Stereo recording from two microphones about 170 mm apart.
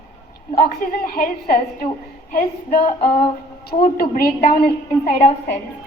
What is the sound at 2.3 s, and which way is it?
Speech, 45° left (ahead or behind).